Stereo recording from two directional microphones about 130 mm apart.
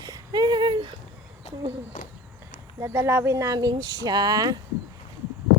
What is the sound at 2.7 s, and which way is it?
Speech, 20° right (ahead or behind).